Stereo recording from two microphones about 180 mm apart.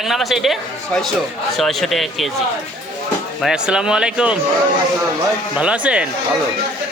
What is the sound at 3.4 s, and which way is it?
Speech, 5° right (ahead or behind).